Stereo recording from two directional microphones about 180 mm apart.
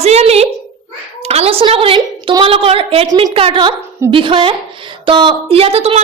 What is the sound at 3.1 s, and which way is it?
A woman's voice, 20° right (ahead or behind).